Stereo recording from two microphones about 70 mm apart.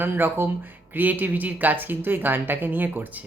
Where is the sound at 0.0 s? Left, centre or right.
Right.